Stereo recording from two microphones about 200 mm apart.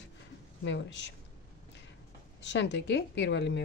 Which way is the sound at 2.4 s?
60° left (ahead or behind).